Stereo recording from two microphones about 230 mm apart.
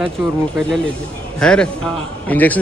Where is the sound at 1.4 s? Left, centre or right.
Centre.